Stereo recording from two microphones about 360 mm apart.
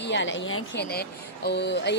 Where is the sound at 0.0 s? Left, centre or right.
Left.